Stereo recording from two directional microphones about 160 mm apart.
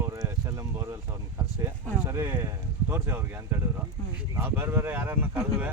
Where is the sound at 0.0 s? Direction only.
15° right (ahead or behind).